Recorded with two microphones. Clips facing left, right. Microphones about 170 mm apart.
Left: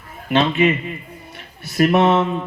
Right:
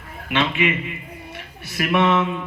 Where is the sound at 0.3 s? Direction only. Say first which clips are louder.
Left 5 dB; 40° left (ahead or behind).